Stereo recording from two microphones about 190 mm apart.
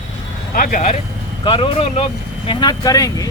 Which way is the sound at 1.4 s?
25° left (ahead or behind).